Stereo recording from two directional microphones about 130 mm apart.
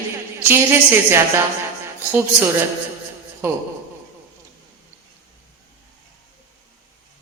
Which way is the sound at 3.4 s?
20° right (ahead or behind).